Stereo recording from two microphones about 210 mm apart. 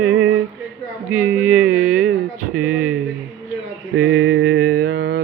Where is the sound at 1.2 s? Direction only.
5° right (ahead or behind).